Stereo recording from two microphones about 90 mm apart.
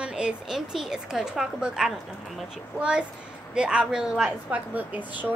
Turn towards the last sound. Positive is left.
turn(degrees=-20)  # may be behind; listen again after turning